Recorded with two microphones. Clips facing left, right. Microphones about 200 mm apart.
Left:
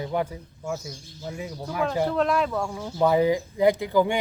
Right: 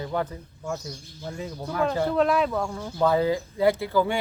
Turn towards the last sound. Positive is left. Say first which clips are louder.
# left 2 dB
turn(degrees=15)  # may be behind; listen again after turning